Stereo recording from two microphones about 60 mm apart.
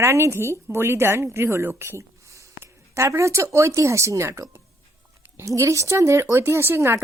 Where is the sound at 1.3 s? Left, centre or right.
Right.